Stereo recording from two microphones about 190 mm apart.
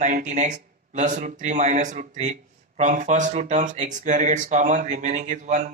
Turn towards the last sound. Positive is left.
turn(degrees=-40)  # may be behind; listen again after turning